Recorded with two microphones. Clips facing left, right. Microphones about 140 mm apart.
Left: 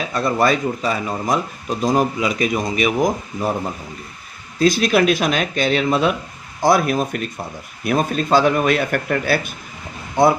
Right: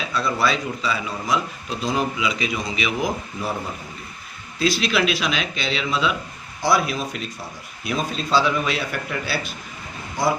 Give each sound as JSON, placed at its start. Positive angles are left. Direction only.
{"t": 0.1, "sound": "speech", "side_deg": 45}
{"t": 4.6, "sound": "speech", "side_deg": 45}